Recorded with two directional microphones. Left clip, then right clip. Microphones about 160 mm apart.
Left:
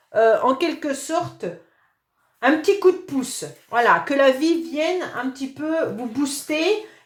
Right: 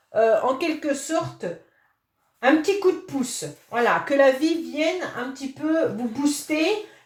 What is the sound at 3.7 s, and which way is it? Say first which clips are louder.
Speech: left 4 dB; 35° left (ahead or behind).